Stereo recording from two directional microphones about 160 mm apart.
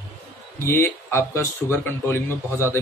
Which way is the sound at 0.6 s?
15° left (ahead or behind).